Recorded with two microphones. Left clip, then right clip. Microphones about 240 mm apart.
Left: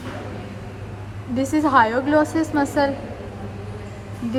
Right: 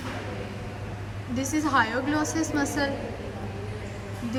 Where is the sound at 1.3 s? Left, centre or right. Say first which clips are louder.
Left 7 dB; centre.